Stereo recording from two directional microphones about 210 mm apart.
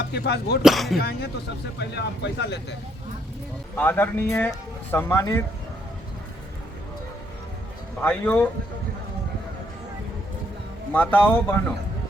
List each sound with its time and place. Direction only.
0.1 s speech: 50° left (ahead or behind)
0.6 s speech: centre (ahead or behind)
0.9 s speech: 50° left (ahead or behind)
3.8 s speech: 10° left (ahead or behind)
8.0 s speech: 10° left (ahead or behind)
10.9 s speech: 10° left (ahead or behind)